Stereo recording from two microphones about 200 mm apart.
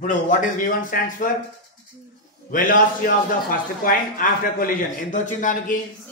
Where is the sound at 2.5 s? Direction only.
45° left (ahead or behind).